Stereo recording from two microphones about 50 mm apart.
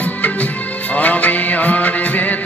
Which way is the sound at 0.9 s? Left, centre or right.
Left.